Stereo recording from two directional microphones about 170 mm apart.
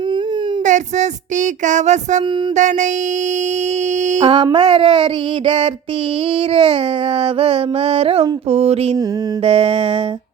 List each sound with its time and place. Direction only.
0.6 s child singing: 45° right (ahead or behind)
1.6 s music: 45° right (ahead or behind)
4.2 s mantra: 25° right (ahead or behind)
6.5 s mantra: 30° right (ahead or behind)